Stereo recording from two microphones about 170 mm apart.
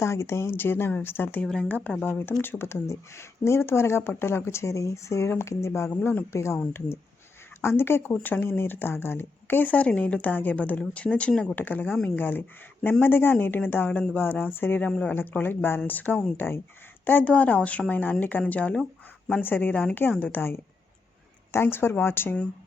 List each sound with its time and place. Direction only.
0.0 s speech: 15° left (ahead or behind)